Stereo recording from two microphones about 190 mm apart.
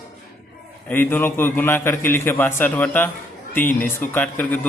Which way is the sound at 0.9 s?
10° left (ahead or behind).